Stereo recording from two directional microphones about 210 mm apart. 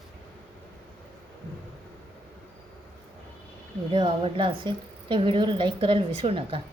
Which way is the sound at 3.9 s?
25° right (ahead or behind).